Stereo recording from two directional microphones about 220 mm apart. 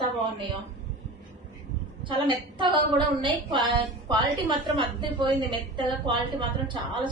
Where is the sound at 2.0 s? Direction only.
20° right (ahead or behind).